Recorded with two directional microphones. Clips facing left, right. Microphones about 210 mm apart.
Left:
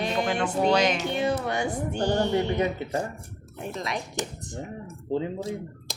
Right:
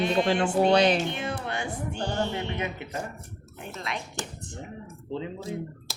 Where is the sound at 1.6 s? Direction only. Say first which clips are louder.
Left 5 dB; 40° left (ahead or behind).